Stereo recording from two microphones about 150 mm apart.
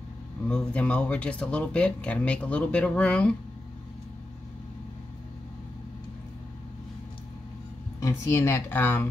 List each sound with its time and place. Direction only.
0.5 s speech: 5° left (ahead or behind)
8.0 s speech: 20° left (ahead or behind)